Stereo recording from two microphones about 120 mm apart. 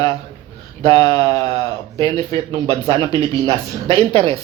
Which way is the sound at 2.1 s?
55° right (ahead or behind).